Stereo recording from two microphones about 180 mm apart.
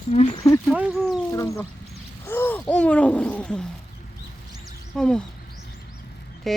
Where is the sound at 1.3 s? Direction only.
15° left (ahead or behind).